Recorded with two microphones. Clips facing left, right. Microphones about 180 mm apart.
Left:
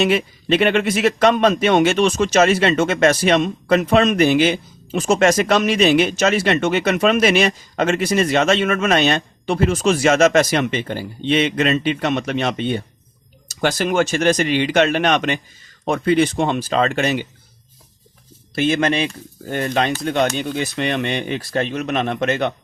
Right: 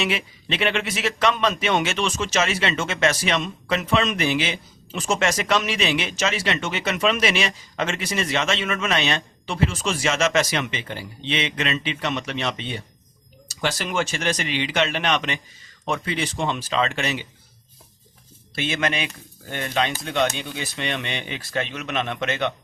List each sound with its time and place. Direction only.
0.0 s a man's voice: 45° left (ahead or behind)
18.5 s a man's voice: 45° left (ahead or behind)